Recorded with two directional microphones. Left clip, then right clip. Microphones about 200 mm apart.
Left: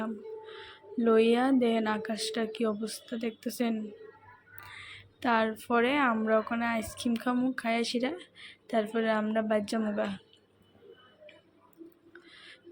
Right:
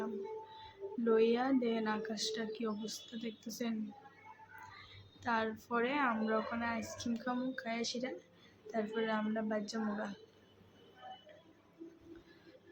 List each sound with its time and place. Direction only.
1.0 s speech: 35° left (ahead or behind)
5.2 s speech: 35° left (ahead or behind)